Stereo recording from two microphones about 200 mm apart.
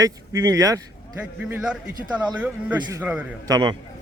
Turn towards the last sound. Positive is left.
turn(degrees=-20)  # may be behind; listen again after turning